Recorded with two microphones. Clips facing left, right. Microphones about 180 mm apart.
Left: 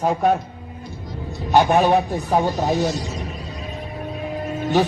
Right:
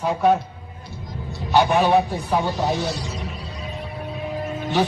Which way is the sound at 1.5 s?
45° left (ahead or behind).